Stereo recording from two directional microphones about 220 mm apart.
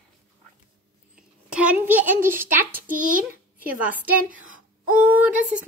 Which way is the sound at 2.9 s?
35° right (ahead or behind).